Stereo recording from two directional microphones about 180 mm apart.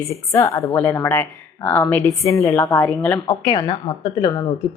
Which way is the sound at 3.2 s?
25° left (ahead or behind).